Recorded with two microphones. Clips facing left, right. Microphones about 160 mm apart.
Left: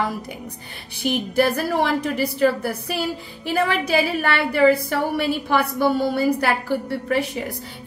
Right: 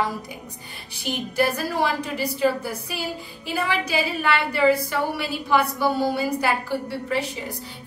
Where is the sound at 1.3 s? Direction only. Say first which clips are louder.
Left 3 dB; 60° left (ahead or behind).